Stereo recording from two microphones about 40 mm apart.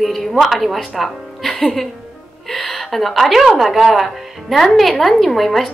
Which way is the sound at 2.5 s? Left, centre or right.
Centre.